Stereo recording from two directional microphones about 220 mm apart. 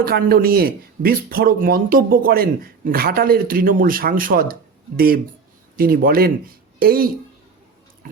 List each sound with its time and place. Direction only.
0.0 s a man's voice: 45° right (ahead or behind)
8.0 s pig: 40° right (ahead or behind)